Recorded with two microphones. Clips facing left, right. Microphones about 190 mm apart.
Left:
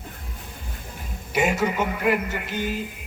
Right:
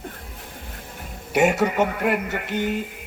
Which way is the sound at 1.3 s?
70° right (ahead or behind).